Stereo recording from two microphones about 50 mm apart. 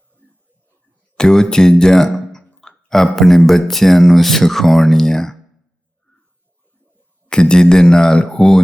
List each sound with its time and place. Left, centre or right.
1.1 s speech: centre
7.3 s speech: centre